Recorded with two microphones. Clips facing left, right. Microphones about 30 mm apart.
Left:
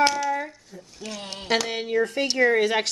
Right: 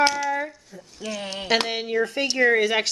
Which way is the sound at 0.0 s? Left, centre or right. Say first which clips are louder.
Even; centre.